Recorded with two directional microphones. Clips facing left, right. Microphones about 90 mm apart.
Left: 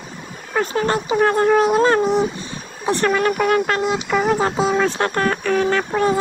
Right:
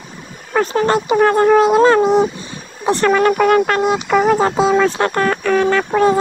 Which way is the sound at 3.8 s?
55° right (ahead or behind).